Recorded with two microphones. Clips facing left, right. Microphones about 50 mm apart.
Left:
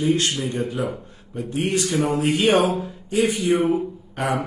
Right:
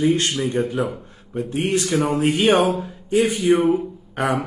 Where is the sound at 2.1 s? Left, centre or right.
Right.